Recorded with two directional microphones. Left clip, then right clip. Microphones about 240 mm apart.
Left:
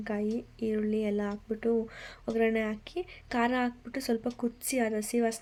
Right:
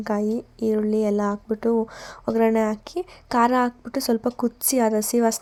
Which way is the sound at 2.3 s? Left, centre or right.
Right.